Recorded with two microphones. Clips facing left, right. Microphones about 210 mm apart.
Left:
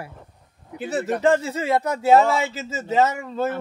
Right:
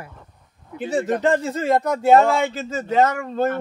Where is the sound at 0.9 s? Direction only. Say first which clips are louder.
Even; 5° left (ahead or behind).